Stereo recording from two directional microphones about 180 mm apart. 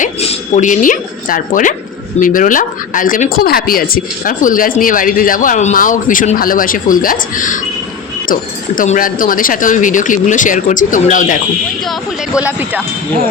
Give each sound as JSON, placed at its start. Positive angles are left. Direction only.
{"t": 0.0, "sound": "a sound", "side_deg": 40}
{"t": 2.2, "sound": "speech", "side_deg": 50}
{"t": 11.9, "sound": "speech", "side_deg": -5}